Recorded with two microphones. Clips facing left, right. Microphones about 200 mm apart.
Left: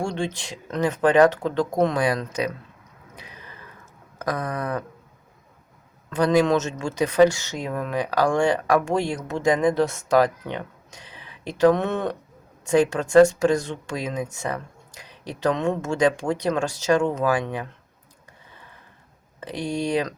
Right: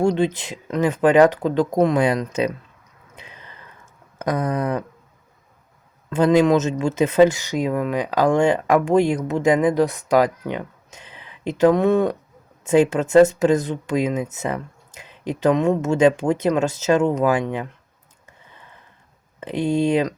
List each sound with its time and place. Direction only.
0.0 s speech: 20° right (ahead or behind)
4.2 s speech: 25° right (ahead or behind)
6.1 s speech: 20° right (ahead or behind)
19.4 s speech: 20° right (ahead or behind)